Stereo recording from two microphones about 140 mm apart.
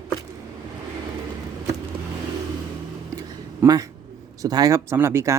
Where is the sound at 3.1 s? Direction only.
25° right (ahead or behind).